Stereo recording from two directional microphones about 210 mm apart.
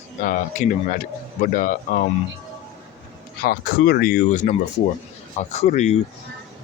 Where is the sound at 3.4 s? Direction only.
45° left (ahead or behind).